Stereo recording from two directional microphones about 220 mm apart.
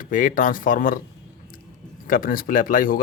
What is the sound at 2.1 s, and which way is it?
Speech, 40° left (ahead or behind).